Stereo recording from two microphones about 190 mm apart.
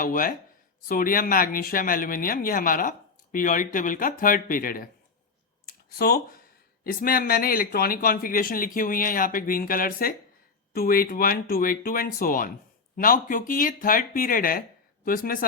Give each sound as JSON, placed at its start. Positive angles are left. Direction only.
{"t": 0.0, "sound": "speech", "side_deg": 45}
{"t": 6.0, "sound": "speech", "side_deg": 55}